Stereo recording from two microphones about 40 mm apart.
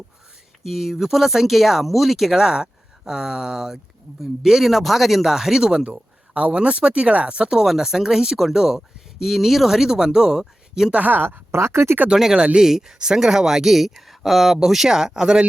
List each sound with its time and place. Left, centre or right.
0.6 s speech: centre; by 7.5 s right
7.5 s speech: centre
10.9 s speech: right
11.2 s speech: right
12.5 s speech: centre